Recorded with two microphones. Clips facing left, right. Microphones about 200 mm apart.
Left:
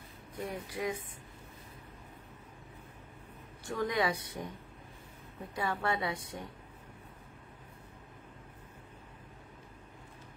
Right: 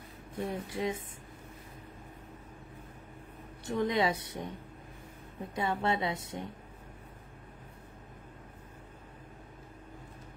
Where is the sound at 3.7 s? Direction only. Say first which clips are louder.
Right 3 dB; 25° right (ahead or behind).